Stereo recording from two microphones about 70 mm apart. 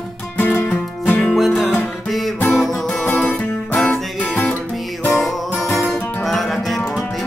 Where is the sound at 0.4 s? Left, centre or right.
Left.